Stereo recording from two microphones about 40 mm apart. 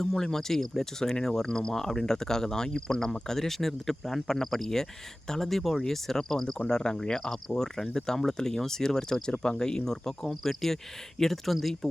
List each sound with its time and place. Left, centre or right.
0.2 s speech: centre